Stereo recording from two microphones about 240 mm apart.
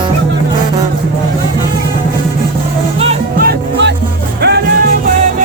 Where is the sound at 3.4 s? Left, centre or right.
Right.